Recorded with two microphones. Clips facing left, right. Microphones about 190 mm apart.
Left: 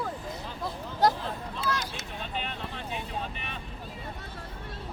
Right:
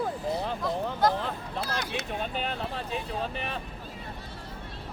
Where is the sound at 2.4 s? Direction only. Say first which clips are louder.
Right 4 dB; 40° right (ahead or behind).